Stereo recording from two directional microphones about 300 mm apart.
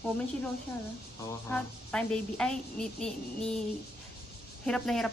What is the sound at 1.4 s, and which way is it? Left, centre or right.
A woman's voice, centre.